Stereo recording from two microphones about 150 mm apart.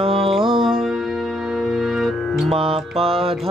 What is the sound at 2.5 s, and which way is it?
Music, 40° right (ahead or behind).